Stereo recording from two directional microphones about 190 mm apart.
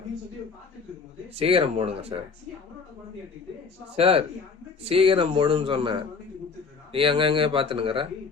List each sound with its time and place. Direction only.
1.4 s speech: 30° right (ahead or behind)
3.9 s speech: 30° right (ahead or behind)